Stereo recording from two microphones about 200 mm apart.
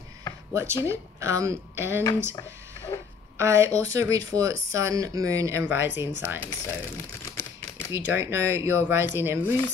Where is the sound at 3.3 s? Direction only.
15° right (ahead or behind).